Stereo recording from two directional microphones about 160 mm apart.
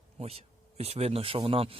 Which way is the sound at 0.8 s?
40° right (ahead or behind).